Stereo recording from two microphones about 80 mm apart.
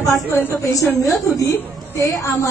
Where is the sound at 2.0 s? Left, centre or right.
Left.